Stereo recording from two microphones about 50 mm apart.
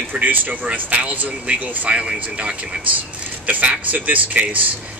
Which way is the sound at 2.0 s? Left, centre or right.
Centre.